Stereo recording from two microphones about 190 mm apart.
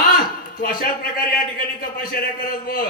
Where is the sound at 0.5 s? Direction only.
50° left (ahead or behind).